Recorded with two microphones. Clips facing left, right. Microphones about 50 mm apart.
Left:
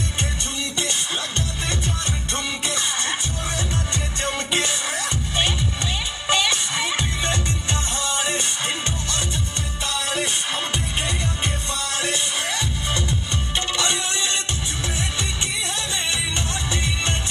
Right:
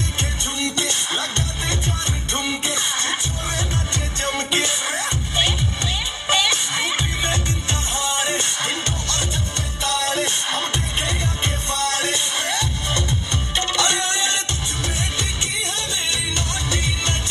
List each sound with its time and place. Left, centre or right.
1.9 s music: right
4.2 s music: right
6.2 s music: right
12.0 s music: left